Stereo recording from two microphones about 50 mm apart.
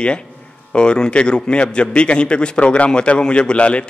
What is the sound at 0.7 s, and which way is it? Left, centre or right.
A man's voice, centre.